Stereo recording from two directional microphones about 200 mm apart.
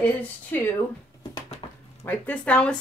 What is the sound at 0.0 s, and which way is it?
Speech, 10° left (ahead or behind).